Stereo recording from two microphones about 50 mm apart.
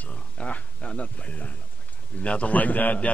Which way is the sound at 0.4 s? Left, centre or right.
Left.